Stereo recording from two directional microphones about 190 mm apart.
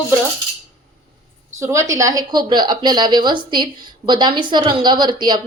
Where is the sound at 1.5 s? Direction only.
15° right (ahead or behind).